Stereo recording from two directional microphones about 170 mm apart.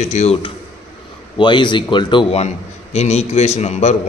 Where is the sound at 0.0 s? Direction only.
40° left (ahead or behind).